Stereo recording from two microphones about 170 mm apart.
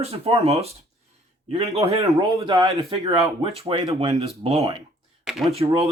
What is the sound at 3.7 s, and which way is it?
Speech, 35° right (ahead or behind).